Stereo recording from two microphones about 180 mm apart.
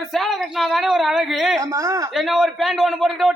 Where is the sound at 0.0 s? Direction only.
Centre (ahead or behind).